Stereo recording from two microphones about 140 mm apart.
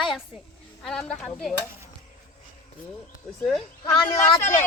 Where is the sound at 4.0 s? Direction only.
25° left (ahead or behind).